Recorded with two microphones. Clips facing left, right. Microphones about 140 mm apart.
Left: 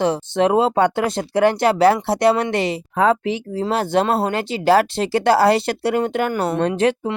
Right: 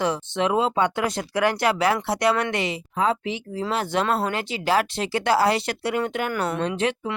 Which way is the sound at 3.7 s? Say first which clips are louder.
Left 5 dB; 35° left (ahead or behind).